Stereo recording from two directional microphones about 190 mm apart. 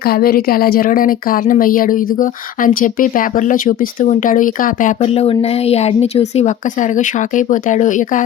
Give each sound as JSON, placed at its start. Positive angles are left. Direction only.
{"t": 0.0, "sound": "a woman's voice", "side_deg": 50}
{"t": 4.9, "sound": "speech", "side_deg": 30}